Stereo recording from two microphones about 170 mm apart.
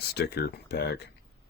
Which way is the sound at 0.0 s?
70° left (ahead or behind).